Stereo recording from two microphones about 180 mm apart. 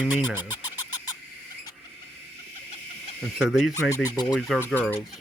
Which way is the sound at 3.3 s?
Centre (ahead or behind).